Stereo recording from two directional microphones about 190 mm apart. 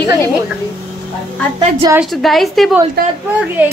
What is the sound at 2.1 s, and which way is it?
Speech, centre (ahead or behind).